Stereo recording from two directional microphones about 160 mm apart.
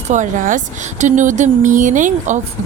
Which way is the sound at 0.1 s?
50° right (ahead or behind).